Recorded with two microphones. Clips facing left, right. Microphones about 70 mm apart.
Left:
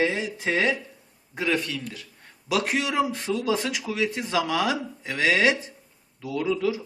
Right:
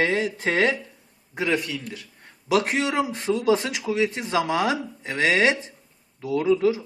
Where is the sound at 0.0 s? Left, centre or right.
Right.